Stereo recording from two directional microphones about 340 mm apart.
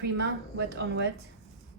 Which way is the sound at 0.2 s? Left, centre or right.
Right.